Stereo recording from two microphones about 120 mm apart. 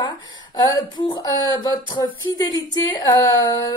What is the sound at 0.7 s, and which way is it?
Speech, 40° left (ahead or behind).